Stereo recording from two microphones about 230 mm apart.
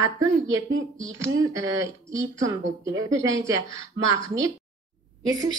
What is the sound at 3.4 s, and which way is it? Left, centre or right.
Speech, centre.